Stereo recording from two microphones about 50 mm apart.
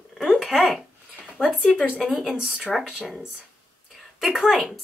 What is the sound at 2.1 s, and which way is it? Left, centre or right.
Speech, centre.